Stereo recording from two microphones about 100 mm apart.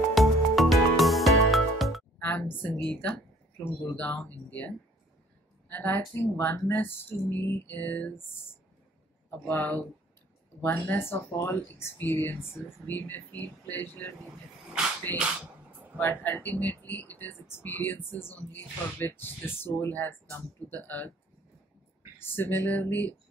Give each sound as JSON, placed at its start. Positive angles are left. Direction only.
{"t": 0.1, "sound": "music", "side_deg": 0}
{"t": 2.1, "sound": "music", "side_deg": 15}
{"t": 3.0, "sound": "speech", "side_deg": 15}
{"t": 9.5, "sound": "speech", "side_deg": 20}
{"t": 14.7, "sound": "dog", "side_deg": -10}
{"t": 15.1, "sound": "music", "side_deg": -10}
{"t": 16.0, "sound": "speech", "side_deg": 20}
{"t": 22.2, "sound": "speech", "side_deg": 20}